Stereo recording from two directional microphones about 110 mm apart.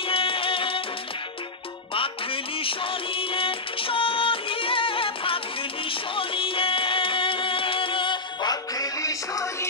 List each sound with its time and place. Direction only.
0.0 s music: 55° left (ahead or behind)
2.0 s music: 55° left (ahead or behind); by 9.7 s 30° left (ahead or behind)